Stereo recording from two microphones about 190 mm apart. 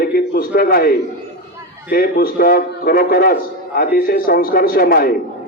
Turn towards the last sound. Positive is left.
turn(degrees=50)  # may be behind; listen again after turning